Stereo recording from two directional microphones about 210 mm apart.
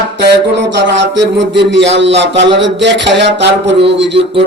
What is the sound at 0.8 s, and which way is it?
A man's voice, 60° right (ahead or behind).